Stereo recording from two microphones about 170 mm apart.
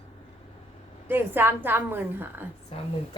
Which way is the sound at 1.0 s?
10° right (ahead or behind).